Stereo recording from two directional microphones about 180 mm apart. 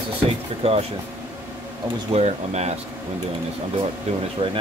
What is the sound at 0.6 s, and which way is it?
Speech, 35° right (ahead or behind).